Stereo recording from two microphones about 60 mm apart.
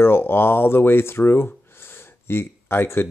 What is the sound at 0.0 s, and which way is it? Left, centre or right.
Speech, left.